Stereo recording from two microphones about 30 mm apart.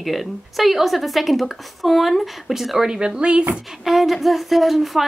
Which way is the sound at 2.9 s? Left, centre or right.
Right.